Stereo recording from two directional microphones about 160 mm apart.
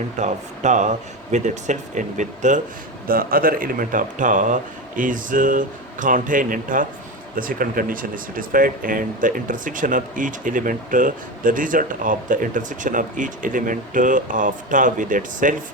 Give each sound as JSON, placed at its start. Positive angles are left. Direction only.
{"t": 0.2, "sound": "speech", "side_deg": -50}
{"t": 3.1, "sound": "speech", "side_deg": -65}